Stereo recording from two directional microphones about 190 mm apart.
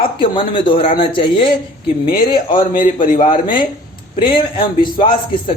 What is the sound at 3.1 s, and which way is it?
Speech, 45° left (ahead or behind).